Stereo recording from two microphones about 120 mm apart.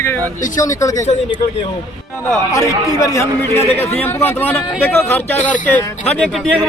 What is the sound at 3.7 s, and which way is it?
Speech, 60° left (ahead or behind).